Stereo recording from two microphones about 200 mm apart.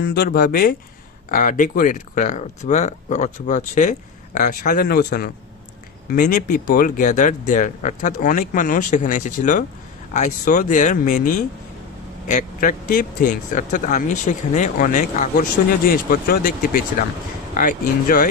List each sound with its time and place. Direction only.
0.0 s speech: 50° left (ahead or behind)
12.3 s speech: 40° left (ahead or behind)